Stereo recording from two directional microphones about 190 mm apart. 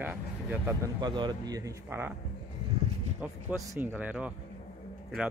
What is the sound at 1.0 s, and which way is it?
Speech, 25° right (ahead or behind).